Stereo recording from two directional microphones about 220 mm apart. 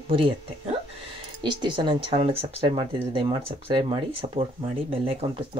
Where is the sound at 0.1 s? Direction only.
25° right (ahead or behind).